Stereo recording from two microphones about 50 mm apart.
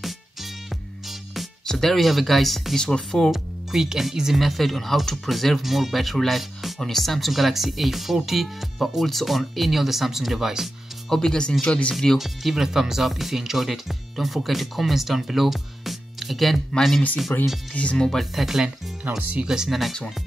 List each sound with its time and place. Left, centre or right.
1.3 s speech: centre
2.8 s speech: centre
3.3 s speech: centre
11.1 s speech: centre
11.9 s speech: centre
12.2 s speech: centre
17.3 s speech: left
17.9 s speech: centre
18.3 s speech: centre
19.0 s speech: right
19.4 s speech: centre